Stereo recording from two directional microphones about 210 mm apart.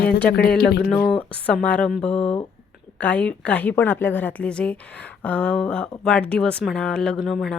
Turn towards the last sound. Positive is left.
turn(degrees=0)  # may be behind; listen again after turning